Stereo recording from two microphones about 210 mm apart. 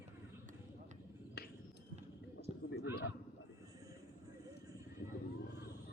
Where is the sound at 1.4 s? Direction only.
50° left (ahead or behind).